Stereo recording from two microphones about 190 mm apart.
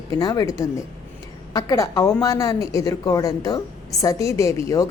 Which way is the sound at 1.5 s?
15° left (ahead or behind).